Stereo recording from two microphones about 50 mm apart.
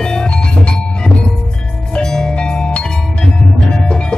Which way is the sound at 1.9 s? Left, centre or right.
Centre.